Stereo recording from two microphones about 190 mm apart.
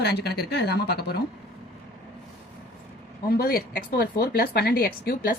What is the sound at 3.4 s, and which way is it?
Speech, 55° left (ahead or behind).